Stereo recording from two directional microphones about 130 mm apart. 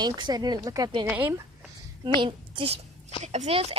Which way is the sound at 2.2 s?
45° right (ahead or behind).